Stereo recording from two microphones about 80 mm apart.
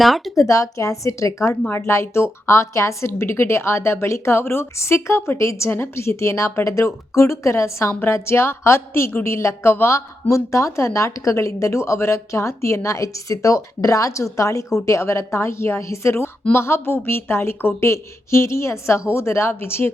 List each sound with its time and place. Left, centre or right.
0.0 s speech: centre
0.3 s a woman's voice: left